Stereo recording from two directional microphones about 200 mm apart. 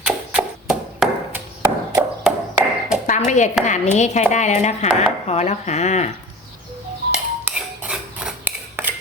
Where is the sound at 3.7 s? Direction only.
35° left (ahead or behind).